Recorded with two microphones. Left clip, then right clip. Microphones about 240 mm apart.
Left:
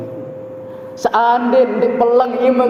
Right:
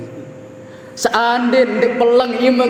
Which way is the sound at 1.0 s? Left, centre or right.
Right.